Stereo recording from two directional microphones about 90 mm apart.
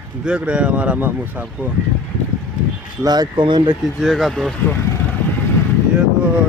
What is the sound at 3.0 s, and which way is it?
Speech, 50° right (ahead or behind).